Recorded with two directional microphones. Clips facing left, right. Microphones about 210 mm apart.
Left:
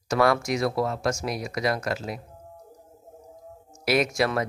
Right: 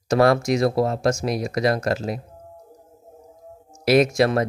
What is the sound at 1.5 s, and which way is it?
Speech, 35° right (ahead or behind).